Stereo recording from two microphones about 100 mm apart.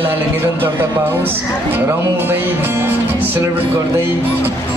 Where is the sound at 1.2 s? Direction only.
20° right (ahead or behind).